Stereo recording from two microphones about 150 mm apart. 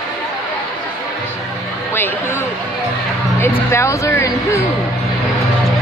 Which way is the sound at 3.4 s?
20° left (ahead or behind).